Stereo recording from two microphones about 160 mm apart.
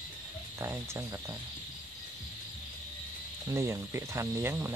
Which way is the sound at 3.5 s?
20° right (ahead or behind).